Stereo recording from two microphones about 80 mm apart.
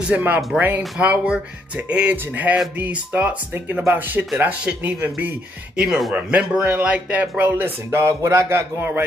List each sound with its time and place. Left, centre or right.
0.0 s speech: centre